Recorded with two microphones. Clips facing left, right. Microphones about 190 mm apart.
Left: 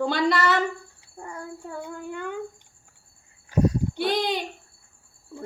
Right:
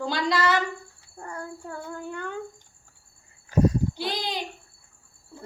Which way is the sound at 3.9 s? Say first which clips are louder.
Left 6 dB; 60° left (ahead or behind).